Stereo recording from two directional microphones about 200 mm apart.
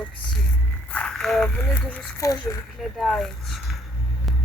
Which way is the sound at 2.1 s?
15° left (ahead or behind).